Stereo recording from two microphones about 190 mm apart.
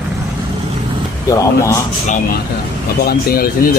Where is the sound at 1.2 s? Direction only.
15° left (ahead or behind).